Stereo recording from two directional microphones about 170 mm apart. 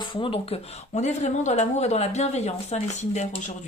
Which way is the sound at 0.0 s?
30° left (ahead or behind).